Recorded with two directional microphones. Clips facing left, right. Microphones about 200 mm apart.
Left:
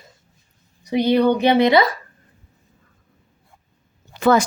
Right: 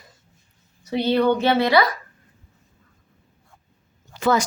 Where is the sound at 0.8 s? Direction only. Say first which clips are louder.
Left 3 dB; 15° left (ahead or behind).